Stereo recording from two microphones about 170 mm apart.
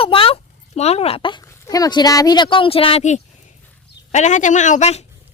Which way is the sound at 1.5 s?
20° left (ahead or behind).